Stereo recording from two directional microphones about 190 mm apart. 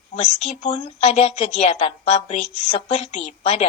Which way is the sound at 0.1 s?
40° left (ahead or behind).